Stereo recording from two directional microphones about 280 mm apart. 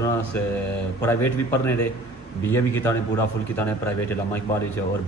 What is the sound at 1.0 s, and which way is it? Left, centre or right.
A man's voice, centre.